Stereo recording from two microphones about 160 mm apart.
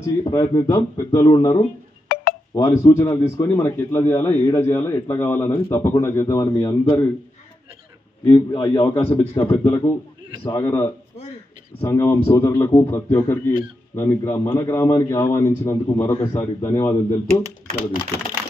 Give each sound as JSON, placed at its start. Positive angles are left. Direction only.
{"t": 0.0, "sound": "speech", "side_deg": 25}
{"t": 2.1, "sound": "a sound", "side_deg": 70}
{"t": 2.5, "sound": "a man's voice", "side_deg": 20}
{"t": 8.3, "sound": "a man's voice", "side_deg": 30}
{"t": 8.8, "sound": "a man's voice", "side_deg": 15}